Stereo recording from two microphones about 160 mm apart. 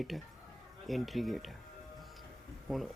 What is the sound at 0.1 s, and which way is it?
Speech, centre (ahead or behind).